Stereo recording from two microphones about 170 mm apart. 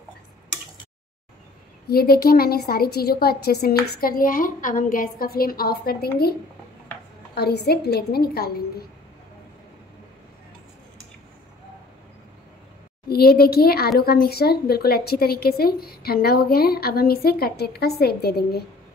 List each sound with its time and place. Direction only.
1.9 s speech: 65° left (ahead or behind)
7.3 s a woman's voice: 70° left (ahead or behind)
13.1 s speech: 65° left (ahead or behind)